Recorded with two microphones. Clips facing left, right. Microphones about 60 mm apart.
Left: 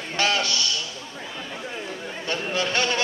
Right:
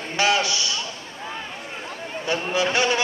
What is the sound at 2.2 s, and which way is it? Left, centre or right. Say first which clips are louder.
Speech: right 4 dB; centre.